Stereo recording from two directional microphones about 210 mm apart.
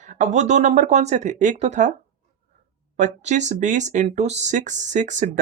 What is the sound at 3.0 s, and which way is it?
Speech, 35° right (ahead or behind).